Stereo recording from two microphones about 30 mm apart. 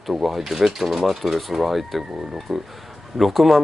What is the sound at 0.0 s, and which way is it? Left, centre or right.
Speech, centre.